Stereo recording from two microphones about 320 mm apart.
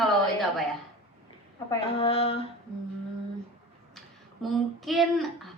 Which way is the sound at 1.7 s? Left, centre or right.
Centre.